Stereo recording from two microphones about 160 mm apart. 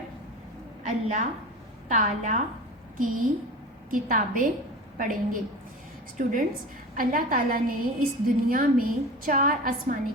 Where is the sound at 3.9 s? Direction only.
60° right (ahead or behind).